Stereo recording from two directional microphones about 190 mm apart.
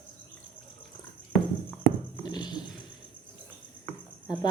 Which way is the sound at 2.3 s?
20° left (ahead or behind).